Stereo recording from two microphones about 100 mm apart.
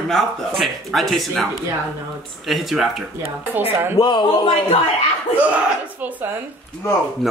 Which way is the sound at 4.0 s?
45° left (ahead or behind).